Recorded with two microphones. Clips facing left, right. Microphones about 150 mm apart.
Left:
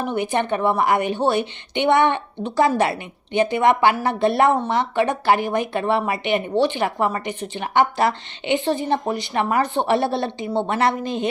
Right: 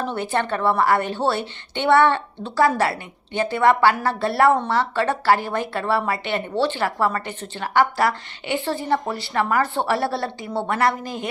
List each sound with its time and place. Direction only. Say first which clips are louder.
0.0 s a woman's voice: left 2 dB; 15° left (ahead or behind)